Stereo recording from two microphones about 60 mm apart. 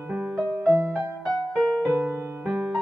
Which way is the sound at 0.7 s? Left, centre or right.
Right.